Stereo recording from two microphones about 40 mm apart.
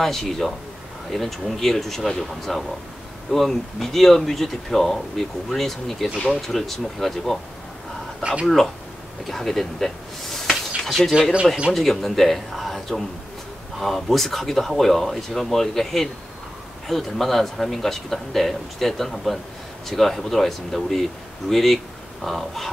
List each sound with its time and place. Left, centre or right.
0.0 s speech: centre
8.2 s speech: right
9.3 s speech: centre